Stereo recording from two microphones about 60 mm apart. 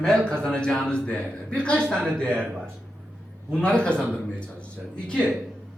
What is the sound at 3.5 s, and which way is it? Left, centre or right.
A man's voice, centre.